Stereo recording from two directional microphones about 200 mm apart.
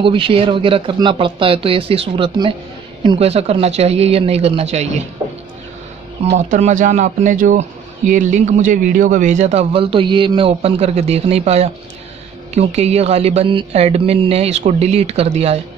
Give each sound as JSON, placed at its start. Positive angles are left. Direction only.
{"t": 0.0, "sound": "speech", "side_deg": -25}
{"t": 6.3, "sound": "speech", "side_deg": -35}